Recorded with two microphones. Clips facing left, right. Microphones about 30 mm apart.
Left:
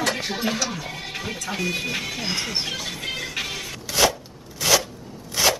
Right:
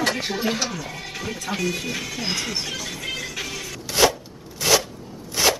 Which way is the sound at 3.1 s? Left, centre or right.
Centre.